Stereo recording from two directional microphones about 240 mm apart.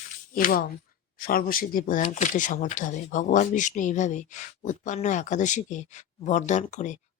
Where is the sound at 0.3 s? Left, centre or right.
Left.